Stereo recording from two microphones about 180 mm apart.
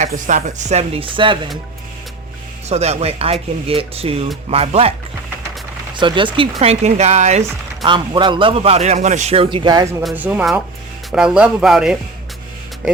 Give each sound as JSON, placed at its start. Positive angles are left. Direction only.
{"t": 0.0, "sound": "speech", "side_deg": -45}
{"t": 2.6, "sound": "speech", "side_deg": -35}
{"t": 7.9, "sound": "a man's voice", "side_deg": -25}
{"t": 10.0, "sound": "speech", "side_deg": -5}